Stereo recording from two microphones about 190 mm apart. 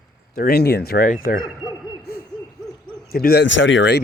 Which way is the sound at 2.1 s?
55° left (ahead or behind).